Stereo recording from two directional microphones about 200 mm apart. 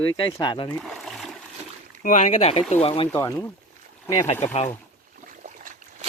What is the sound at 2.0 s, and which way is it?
Speech, 35° left (ahead or behind).